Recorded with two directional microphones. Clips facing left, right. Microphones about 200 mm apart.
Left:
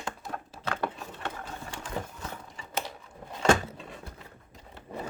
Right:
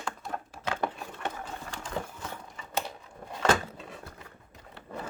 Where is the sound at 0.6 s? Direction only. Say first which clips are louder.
Even; 15° right (ahead or behind).